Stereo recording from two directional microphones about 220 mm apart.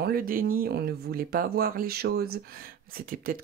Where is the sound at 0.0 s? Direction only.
40° right (ahead or behind).